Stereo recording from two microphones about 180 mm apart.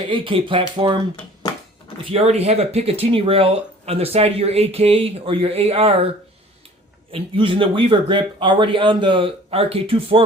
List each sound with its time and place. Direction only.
0.1 s speech: 30° right (ahead or behind)
2.1 s speech: 35° right (ahead or behind)
7.1 s speech: 30° right (ahead or behind)